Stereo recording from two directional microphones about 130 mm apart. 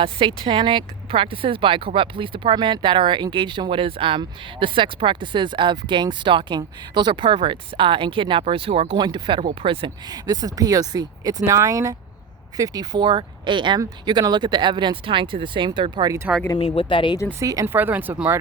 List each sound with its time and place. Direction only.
0.0 s speech: 45° right (ahead or behind)
9.0 s speech: 35° right (ahead or behind)
16.6 s speech: 45° left (ahead or behind)
17.4 s speech: 25° right (ahead or behind)
17.7 s speech: 15° right (ahead or behind)